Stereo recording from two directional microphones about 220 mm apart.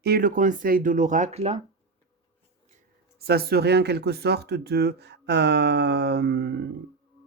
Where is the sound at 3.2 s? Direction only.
45° right (ahead or behind).